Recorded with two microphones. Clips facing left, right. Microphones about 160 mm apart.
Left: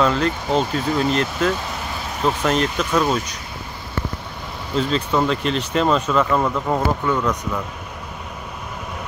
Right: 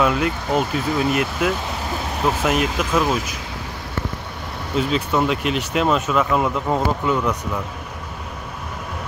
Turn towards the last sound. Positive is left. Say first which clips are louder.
# even
turn(degrees=-15)  # may be behind; listen again after turning